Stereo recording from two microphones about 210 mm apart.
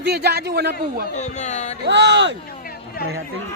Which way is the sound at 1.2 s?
35° left (ahead or behind).